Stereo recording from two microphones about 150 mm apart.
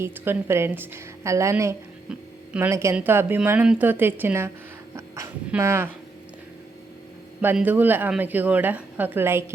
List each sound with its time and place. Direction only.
0.0 s a woman's voice: 15° right (ahead or behind)
2.0 s music: 5° right (ahead or behind)
2.6 s a woman's voice: 20° right (ahead or behind)
4.9 s a sound: 20° right (ahead or behind)
5.5 s a woman's voice: 15° right (ahead or behind)
7.4 s a woman's voice: 10° right (ahead or behind)